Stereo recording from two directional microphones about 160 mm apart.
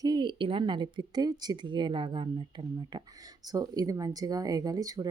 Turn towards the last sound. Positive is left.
turn(degrees=-20)  # may be behind; listen again after turning